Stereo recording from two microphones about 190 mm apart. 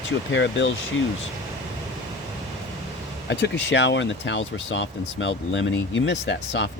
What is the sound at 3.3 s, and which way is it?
Speech, 70° left (ahead or behind).